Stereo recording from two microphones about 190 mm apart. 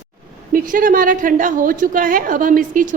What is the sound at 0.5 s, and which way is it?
A woman's voice, 45° right (ahead or behind).